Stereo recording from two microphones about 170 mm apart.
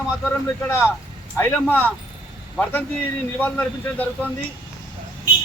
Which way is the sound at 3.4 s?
10° left (ahead or behind).